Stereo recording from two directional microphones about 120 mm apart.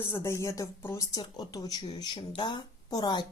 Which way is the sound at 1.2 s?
35° left (ahead or behind).